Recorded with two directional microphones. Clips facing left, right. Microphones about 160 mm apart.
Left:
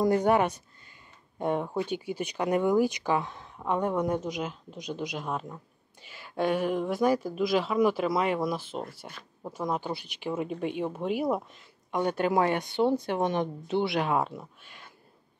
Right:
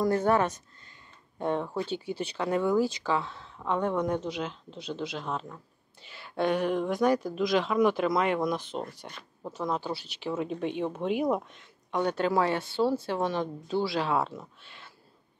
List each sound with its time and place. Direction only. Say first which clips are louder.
0.0 s speech: left 1 dB; 15° left (ahead or behind)